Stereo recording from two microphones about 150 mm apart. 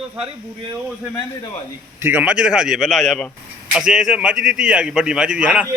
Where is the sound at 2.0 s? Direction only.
15° right (ahead or behind).